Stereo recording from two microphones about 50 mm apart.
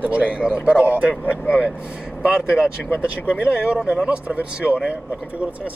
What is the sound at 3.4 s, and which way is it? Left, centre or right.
Speech, right.